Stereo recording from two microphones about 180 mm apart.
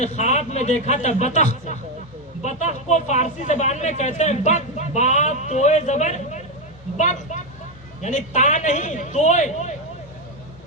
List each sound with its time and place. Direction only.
0.0 s a woman's voice: 40° left (ahead or behind)